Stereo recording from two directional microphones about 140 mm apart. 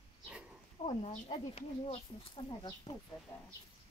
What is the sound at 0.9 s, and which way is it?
Speech, 45° left (ahead or behind).